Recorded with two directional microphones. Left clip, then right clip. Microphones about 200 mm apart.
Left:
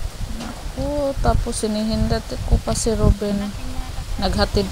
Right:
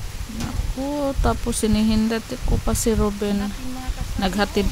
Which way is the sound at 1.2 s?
45° right (ahead or behind).